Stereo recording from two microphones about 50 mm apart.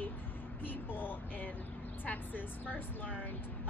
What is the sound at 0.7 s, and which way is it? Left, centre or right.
Speech, left.